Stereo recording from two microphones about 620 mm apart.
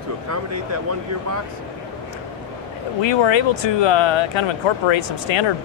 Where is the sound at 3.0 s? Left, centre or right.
Left.